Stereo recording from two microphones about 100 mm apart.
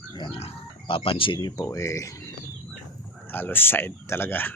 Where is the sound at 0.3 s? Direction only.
90° left.